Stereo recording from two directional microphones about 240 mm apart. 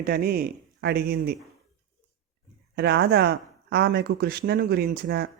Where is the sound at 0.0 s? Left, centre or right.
Right.